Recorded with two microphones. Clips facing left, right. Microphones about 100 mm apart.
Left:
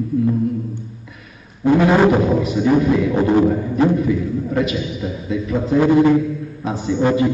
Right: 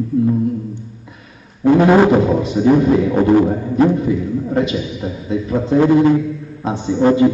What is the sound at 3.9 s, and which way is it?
A man's voice, 30° right (ahead or behind).